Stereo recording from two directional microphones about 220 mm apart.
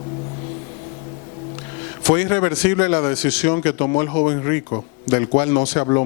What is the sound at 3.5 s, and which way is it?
Speech, 25° left (ahead or behind).